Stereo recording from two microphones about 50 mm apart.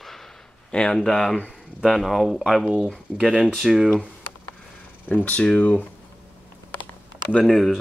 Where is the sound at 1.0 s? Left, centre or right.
Centre.